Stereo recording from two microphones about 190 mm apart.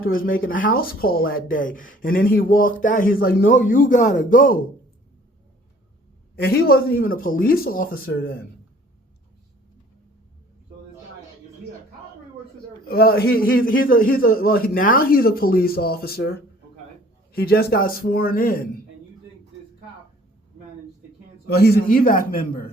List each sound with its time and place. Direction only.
0.4 s speech: 50° left (ahead or behind)
6.4 s speech: 55° left (ahead or behind)
12.9 s speech: 55° left (ahead or behind)
21.4 s speech: 55° left (ahead or behind)